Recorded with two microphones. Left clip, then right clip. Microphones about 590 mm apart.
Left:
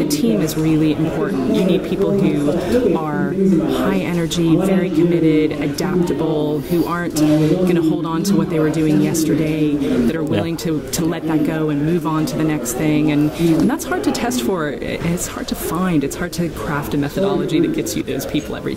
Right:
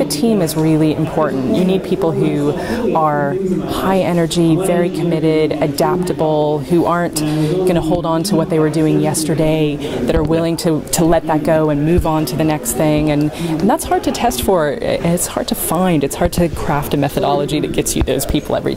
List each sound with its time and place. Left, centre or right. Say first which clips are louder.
0.2 s speech: right 3 dB; right
3.9 s speech: right 6 dB; right
11.1 s speech: right 7 dB; right
15.8 s speech: right 6 dB; right